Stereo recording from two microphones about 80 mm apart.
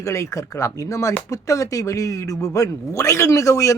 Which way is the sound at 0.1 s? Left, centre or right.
Left.